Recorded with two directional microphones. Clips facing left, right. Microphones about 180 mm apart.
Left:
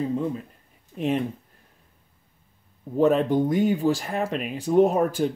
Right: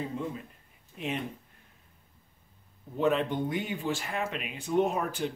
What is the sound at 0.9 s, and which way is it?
Speech, 40° left (ahead or behind).